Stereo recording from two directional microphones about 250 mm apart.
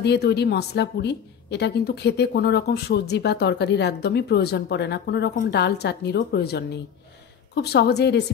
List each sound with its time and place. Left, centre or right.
0.0 s a woman's voice: left